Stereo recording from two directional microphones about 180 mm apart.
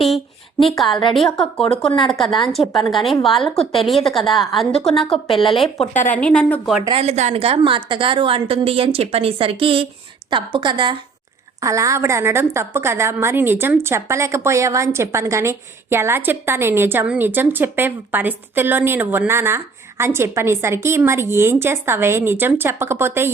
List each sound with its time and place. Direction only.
0.6 s a woman's voice: centre (ahead or behind)
5.3 s speech: 30° left (ahead or behind)
6.1 s speech: 5° left (ahead or behind)
6.8 s a woman's voice: 35° right (ahead or behind); by 23.3 s 15° right (ahead or behind)